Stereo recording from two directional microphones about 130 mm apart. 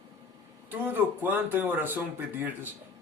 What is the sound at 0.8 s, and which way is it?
Speech, 15° right (ahead or behind).